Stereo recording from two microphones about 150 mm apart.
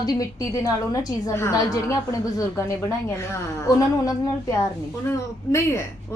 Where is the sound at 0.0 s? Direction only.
25° left (ahead or behind).